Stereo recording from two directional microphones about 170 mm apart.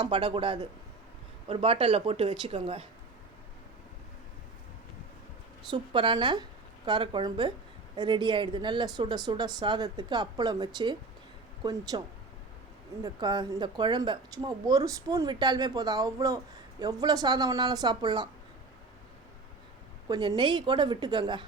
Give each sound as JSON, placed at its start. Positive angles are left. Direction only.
{"t": 0.0, "sound": "speech", "side_deg": -30}
{"t": 5.7, "sound": "speech", "side_deg": -30}
{"t": 20.1, "sound": "speech", "side_deg": -25}